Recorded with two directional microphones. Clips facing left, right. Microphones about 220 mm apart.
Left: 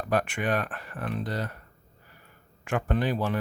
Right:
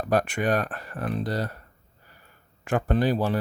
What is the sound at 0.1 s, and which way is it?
Speech, 40° right (ahead or behind).